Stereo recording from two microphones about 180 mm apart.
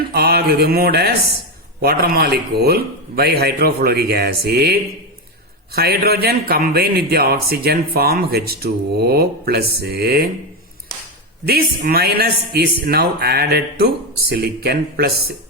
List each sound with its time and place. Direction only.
0.1 s speech: 60° right (ahead or behind)
11.4 s speech: 55° right (ahead or behind)